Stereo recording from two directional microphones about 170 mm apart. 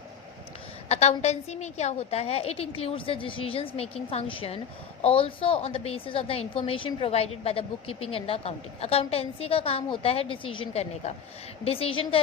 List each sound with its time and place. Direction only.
0.9 s a woman's voice: 40° left (ahead or behind)